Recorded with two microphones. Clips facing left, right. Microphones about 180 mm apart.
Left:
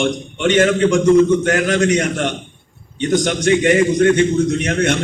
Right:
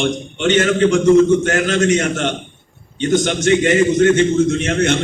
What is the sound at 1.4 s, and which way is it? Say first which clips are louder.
A man's voice: left 1 dB; 25° right (ahead or behind).